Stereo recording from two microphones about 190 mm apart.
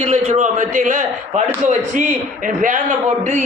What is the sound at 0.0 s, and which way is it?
A man's voice, 45° right (ahead or behind).